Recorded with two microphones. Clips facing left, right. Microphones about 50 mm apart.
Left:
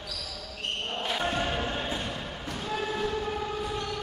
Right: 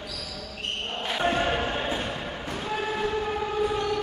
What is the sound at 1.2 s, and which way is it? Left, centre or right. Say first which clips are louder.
Chant: right 8 dB; right.